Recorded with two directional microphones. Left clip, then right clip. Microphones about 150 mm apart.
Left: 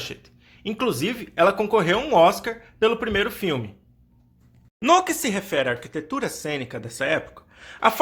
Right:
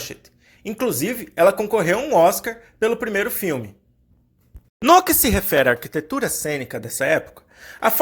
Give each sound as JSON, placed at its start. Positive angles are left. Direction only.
{"t": 0.0, "sound": "speech", "side_deg": -15}
{"t": 4.9, "sound": "speech", "side_deg": -35}